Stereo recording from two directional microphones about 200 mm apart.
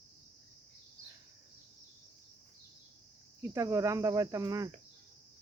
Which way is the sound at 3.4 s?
15° right (ahead or behind).